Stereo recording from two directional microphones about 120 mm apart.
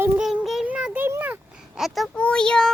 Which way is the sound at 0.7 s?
10° right (ahead or behind).